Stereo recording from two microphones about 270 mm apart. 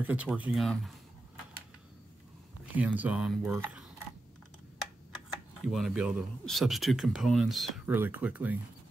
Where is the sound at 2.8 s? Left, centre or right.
Centre.